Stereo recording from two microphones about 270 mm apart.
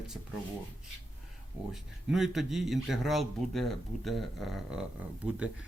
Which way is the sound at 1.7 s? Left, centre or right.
Centre.